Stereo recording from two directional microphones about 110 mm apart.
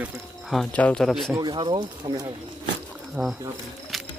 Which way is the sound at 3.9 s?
Centre (ahead or behind).